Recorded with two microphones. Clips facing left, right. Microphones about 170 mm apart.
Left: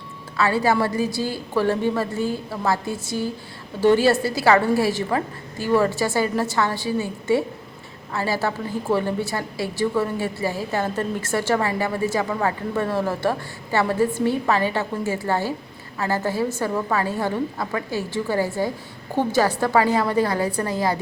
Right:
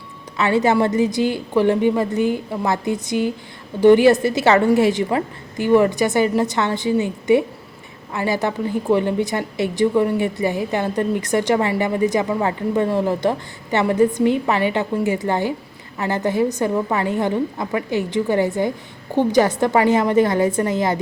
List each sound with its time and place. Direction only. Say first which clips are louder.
0.3 s a woman's voice: right 3 dB; 20° right (ahead or behind)